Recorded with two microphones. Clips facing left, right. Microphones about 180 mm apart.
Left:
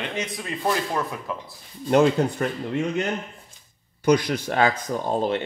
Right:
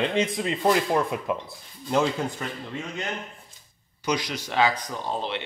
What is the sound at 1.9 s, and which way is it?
Speech, 60° left (ahead or behind).